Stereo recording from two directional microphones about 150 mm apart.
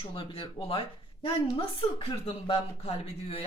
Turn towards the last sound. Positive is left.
turn(degrees=40)  # may be behind; listen again after turning